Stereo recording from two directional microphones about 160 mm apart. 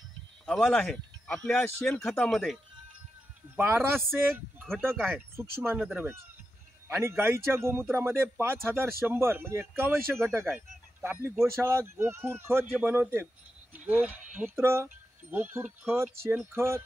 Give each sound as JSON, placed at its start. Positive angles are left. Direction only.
{"t": 0.5, "sound": "speech", "side_deg": 5}
{"t": 3.5, "sound": "speech", "side_deg": -15}
{"t": 6.9, "sound": "speech", "side_deg": -15}